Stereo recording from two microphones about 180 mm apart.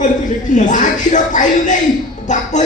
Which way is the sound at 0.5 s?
45° left (ahead or behind).